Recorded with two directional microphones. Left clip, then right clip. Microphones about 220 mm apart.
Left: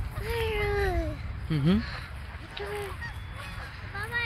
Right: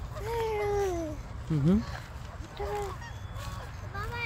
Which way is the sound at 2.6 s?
25° right (ahead or behind).